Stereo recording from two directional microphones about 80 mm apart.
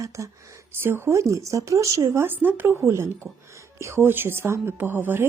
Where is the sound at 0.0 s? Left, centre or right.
Right.